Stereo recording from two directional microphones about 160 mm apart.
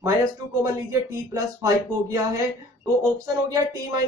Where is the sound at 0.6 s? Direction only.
20° right (ahead or behind).